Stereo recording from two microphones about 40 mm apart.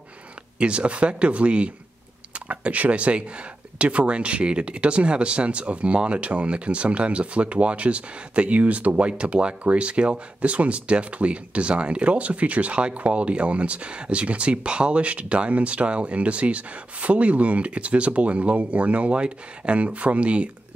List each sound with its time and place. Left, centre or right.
0.6 s speech: right